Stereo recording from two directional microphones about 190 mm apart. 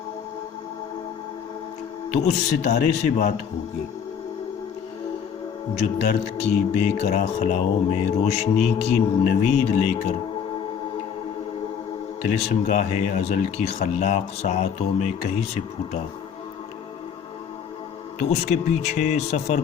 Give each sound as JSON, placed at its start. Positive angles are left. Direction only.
{"t": 2.1, "sound": "speech", "side_deg": 35}
{"t": 5.8, "sound": "speech", "side_deg": 40}
{"t": 12.3, "sound": "speech", "side_deg": 35}
{"t": 18.3, "sound": "speech", "side_deg": 40}